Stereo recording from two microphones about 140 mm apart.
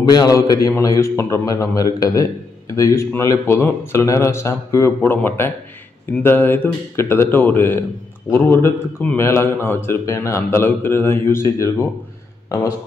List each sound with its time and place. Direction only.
0.1 s a man's voice: 30° left (ahead or behind)